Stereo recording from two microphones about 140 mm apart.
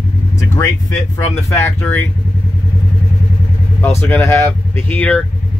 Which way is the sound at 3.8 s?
15° left (ahead or behind).